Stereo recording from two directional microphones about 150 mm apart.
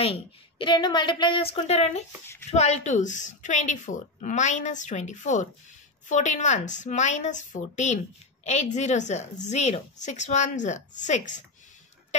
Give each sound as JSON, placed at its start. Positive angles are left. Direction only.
{"t": 0.0, "sound": "a woman's voice", "side_deg": 35}